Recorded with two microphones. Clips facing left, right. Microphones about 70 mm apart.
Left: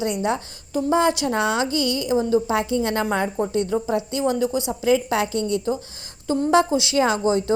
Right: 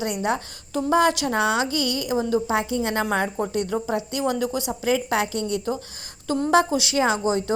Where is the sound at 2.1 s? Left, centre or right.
Right.